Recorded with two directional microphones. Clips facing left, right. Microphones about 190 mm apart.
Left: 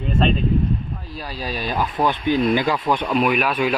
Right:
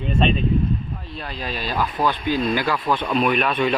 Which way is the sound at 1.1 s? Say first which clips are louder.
Left 2 dB; 5° left (ahead or behind).